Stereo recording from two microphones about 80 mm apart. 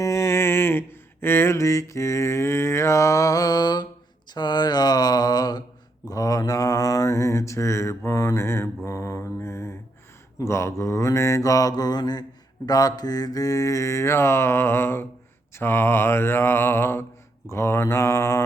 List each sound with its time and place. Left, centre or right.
0.0 s music: left
4.4 s mantra: left